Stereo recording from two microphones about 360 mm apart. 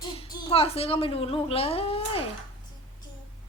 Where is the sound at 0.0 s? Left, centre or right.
Centre.